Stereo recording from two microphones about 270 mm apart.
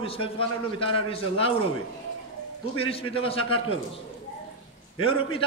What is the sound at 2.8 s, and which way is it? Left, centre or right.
Speech, centre.